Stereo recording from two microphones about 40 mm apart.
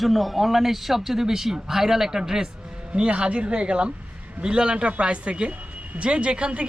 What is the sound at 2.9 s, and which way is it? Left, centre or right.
Speech, right.